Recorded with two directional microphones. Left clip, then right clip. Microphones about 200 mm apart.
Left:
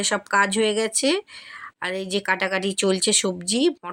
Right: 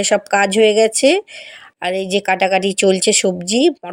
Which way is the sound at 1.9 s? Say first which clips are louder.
Right 9 dB; 25° left (ahead or behind).